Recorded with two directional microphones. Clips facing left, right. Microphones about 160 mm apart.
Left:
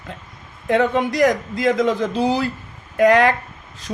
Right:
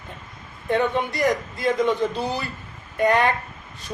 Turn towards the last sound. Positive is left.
turn(degrees=90)